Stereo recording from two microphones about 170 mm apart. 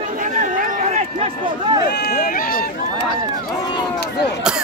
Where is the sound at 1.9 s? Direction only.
70° left (ahead or behind).